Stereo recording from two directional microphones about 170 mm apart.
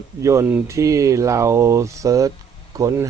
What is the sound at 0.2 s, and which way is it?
Speech, 15° right (ahead or behind).